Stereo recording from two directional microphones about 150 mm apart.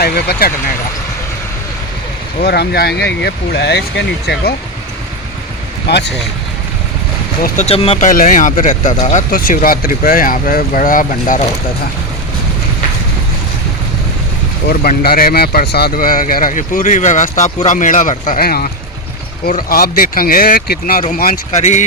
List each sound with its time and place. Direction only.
0.0 s speech: 90° left
2.4 s speech: 90° left
5.9 s speech: 90° left
7.4 s speech: 50° left (ahead or behind)
8.0 s speech: 65° left (ahead or behind)
9.3 s speech: 70° left (ahead or behind)
14.7 s speech: 80° left
19.5 s speech: 75° left (ahead or behind)
21.6 s speech: 50° left (ahead or behind)